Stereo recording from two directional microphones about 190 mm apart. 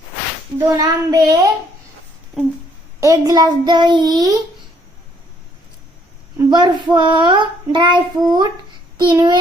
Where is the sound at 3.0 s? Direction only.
20° right (ahead or behind).